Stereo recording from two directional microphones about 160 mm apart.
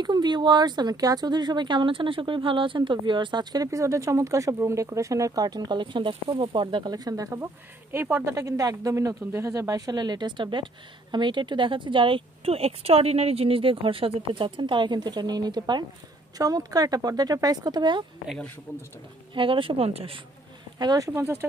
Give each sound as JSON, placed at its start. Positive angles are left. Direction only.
{"t": 0.0, "sound": "speech", "side_deg": -25}
{"t": 18.7, "sound": "speech", "side_deg": 15}
{"t": 19.3, "sound": "speech", "side_deg": -30}
{"t": 20.8, "sound": "speech", "side_deg": -20}